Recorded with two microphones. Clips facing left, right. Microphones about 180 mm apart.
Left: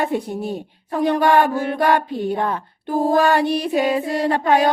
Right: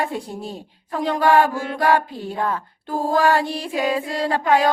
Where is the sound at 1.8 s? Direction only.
25° left (ahead or behind).